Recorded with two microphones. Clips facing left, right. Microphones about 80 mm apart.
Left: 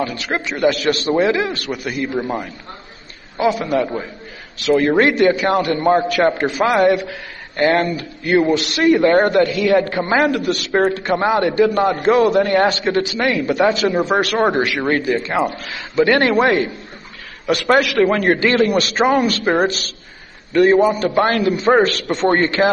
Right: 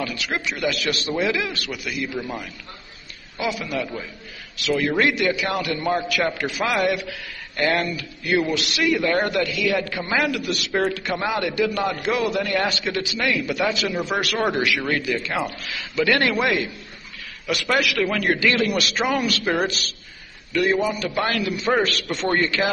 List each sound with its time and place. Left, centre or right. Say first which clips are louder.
0.0 s a man's voice: left 5 dB; left